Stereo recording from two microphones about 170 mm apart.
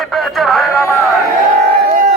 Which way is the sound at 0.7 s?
15° left (ahead or behind).